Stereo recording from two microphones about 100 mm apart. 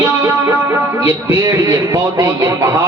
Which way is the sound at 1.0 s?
35° right (ahead or behind).